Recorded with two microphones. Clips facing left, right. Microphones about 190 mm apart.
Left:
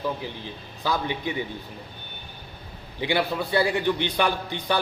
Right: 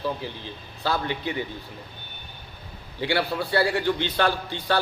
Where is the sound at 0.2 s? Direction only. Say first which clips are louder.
Even; 15° left (ahead or behind).